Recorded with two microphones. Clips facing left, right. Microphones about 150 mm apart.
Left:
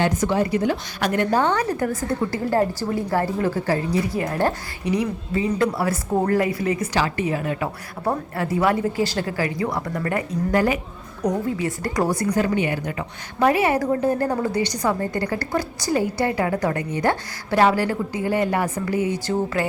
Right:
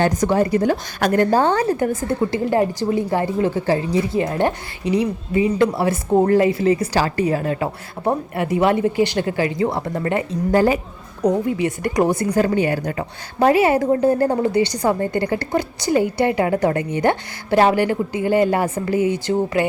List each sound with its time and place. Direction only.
0.0 s a woman's voice: 40° right (ahead or behind)
8.0 s a woman's voice: 20° right (ahead or behind)
11.4 s a woman's voice: 20° right (ahead or behind); by 13.5 s 40° right (ahead or behind)
13.5 s a woman's voice: 25° right (ahead or behind)